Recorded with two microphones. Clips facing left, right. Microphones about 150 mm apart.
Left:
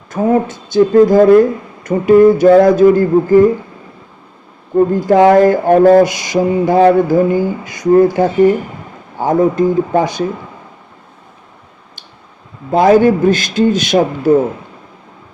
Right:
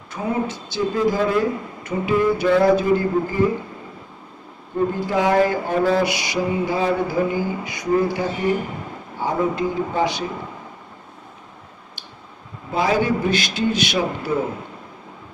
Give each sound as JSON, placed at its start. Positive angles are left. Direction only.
{"t": 0.1, "sound": "speech", "side_deg": 50}
{"t": 5.0, "sound": "speech", "side_deg": 55}
{"t": 6.7, "sound": "speech", "side_deg": 55}
{"t": 12.7, "sound": "speech", "side_deg": 50}